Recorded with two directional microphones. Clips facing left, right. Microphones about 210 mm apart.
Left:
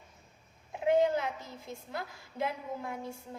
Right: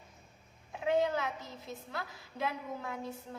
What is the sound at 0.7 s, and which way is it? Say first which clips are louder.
A woman's voice: left 4 dB; 15° left (ahead or behind).